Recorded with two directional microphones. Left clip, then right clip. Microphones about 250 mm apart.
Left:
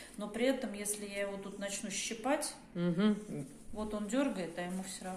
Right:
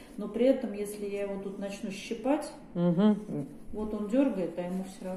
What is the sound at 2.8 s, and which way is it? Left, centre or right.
Speech, centre.